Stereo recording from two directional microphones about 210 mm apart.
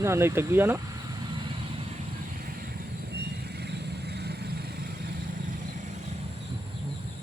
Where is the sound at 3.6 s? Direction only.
50° right (ahead or behind).